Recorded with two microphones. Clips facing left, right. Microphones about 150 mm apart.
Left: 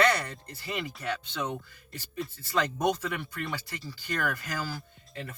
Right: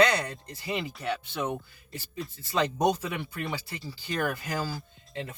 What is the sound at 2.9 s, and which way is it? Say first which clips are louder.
Speech: even; 15° right (ahead or behind).